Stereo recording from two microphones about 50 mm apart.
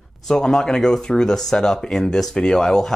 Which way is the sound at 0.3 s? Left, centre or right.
Centre.